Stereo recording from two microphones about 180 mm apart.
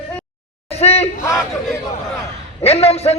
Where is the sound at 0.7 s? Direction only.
35° left (ahead or behind).